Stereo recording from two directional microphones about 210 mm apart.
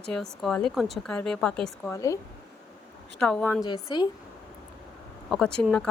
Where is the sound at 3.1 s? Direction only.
5° left (ahead or behind).